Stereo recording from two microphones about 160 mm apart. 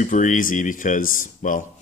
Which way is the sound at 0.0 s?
50° left (ahead or behind).